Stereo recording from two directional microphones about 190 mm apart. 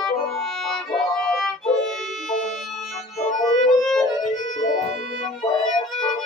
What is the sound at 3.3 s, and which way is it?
Music, 35° left (ahead or behind).